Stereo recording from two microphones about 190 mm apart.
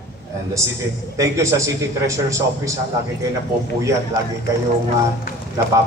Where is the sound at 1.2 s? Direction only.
15° right (ahead or behind).